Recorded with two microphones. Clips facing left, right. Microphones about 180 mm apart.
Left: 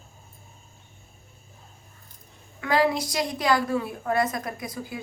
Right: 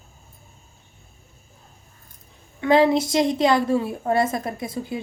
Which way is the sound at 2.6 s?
25° right (ahead or behind).